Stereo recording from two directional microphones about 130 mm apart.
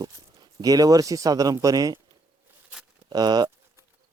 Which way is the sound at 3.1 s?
30° right (ahead or behind).